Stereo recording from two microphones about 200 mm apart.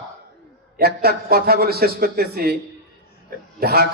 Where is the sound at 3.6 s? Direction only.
50° right (ahead or behind).